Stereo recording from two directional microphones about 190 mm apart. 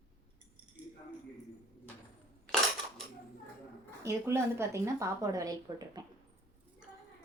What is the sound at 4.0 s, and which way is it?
Speech, 15° right (ahead or behind).